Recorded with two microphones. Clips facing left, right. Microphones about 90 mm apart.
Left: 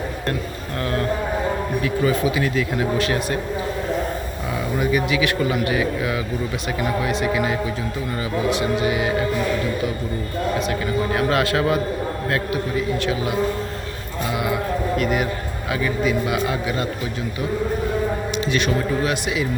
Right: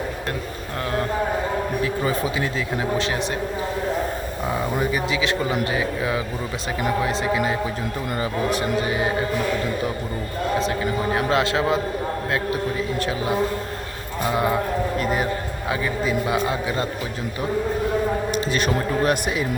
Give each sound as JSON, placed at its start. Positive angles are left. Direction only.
{"t": 1.8, "sound": "a man's voice", "side_deg": -30}
{"t": 4.8, "sound": "a man's voice", "side_deg": -25}
{"t": 10.6, "sound": "a man's voice", "side_deg": -25}
{"t": 14.3, "sound": "a man's voice", "side_deg": -35}
{"t": 18.3, "sound": "a man's voice", "side_deg": -40}